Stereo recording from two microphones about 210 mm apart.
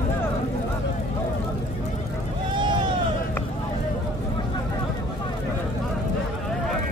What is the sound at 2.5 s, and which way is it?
Run, 20° right (ahead or behind).